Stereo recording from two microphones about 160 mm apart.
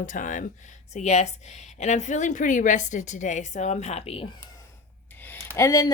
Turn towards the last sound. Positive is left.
turn(degrees=20)  # may be behind; listen again after turning